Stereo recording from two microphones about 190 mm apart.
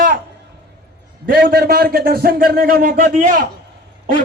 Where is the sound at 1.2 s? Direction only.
50° right (ahead or behind).